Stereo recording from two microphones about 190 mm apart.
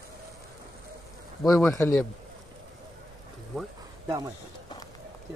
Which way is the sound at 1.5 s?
15° left (ahead or behind).